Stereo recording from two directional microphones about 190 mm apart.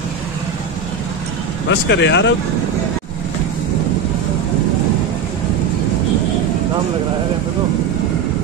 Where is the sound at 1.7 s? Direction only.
65° left (ahead or behind).